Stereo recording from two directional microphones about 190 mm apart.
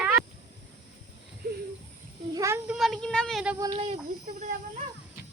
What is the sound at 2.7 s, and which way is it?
Speech, centre (ahead or behind).